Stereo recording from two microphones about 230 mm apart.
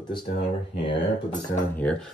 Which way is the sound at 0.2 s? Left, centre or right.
Left.